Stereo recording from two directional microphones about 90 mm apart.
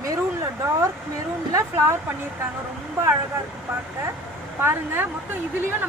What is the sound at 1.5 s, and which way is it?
Speech, 35° right (ahead or behind).